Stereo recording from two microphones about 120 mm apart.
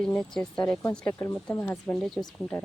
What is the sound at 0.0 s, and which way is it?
Speech, 5° left (ahead or behind).